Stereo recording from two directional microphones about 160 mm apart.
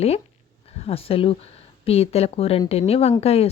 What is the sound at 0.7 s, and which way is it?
Speech, 40° left (ahead or behind).